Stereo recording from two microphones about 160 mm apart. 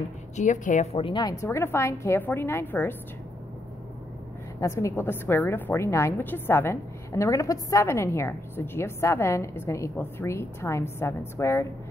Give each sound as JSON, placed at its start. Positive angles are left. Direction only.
{"t": 0.4, "sound": "a woman's voice", "side_deg": 50}
{"t": 0.9, "sound": "a woman's voice", "side_deg": 30}
{"t": 4.6, "sound": "a woman's voice", "side_deg": 20}